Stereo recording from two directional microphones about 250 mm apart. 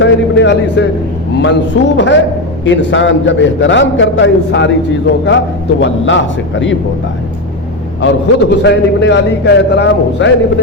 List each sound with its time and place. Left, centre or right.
0.0 s a man's voice: left
5.8 s a man's voice: left
8.0 s a man's voice: left